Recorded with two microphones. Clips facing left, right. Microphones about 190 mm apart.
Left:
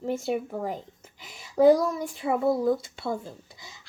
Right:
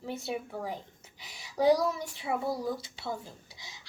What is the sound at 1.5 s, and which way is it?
A child's voice, 50° left (ahead or behind).